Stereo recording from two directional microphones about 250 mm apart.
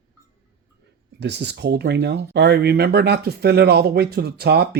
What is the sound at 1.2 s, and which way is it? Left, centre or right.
Speech, right.